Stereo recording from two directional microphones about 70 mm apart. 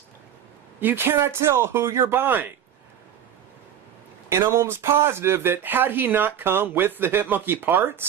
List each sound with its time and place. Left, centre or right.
0.8 s speech: right
4.3 s speech: right